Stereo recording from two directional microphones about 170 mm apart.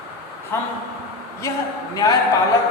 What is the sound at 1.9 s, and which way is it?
Speech, 20° left (ahead or behind).